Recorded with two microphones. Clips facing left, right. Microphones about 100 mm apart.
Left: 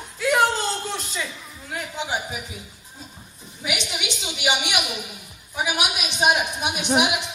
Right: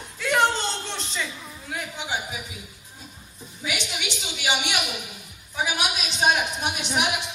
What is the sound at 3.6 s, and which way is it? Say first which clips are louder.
A woman's voice: left 2 dB; 20° left (ahead or behind).